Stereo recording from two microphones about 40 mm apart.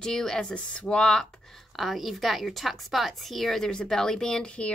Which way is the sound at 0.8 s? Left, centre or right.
Left.